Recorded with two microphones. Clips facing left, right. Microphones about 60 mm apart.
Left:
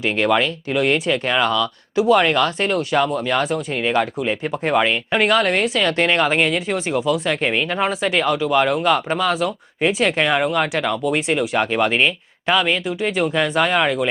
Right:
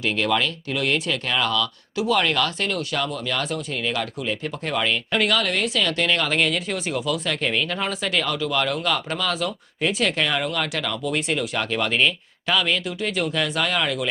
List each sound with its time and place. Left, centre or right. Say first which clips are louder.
0.0 s speech: left 4 dB; left